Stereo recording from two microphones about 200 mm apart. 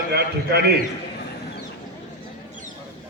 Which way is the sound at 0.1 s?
55° right (ahead or behind).